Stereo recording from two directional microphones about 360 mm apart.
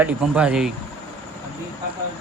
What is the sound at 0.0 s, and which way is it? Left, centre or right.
Speech, centre.